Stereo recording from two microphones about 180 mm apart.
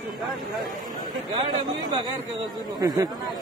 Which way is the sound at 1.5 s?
25° right (ahead or behind).